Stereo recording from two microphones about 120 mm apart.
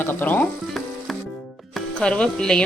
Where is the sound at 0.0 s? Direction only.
15° left (ahead or behind).